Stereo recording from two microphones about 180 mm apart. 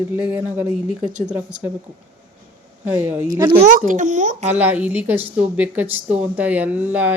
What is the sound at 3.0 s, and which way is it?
Speech, 15° right (ahead or behind).